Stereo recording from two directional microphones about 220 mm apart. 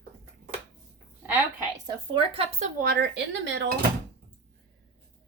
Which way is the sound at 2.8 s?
50° right (ahead or behind).